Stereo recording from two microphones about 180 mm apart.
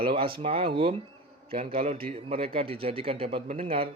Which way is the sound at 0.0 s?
30° right (ahead or behind).